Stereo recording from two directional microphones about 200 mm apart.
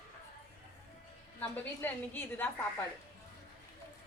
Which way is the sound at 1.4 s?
10° left (ahead or behind).